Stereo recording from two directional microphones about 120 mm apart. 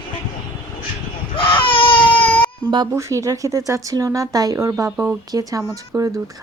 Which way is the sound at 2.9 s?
25° right (ahead or behind).